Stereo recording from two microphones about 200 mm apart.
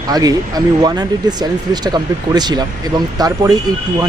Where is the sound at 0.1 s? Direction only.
20° right (ahead or behind).